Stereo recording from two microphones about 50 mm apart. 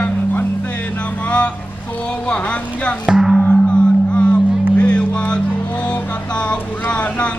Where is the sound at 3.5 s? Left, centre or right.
Centre.